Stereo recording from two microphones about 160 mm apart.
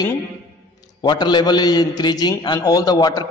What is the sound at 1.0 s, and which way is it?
A man's voice, 25° left (ahead or behind).